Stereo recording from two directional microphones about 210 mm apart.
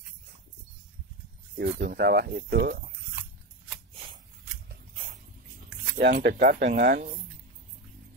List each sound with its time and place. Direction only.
1.6 s speech: 45° right (ahead or behind)
5.9 s speech: 45° right (ahead or behind)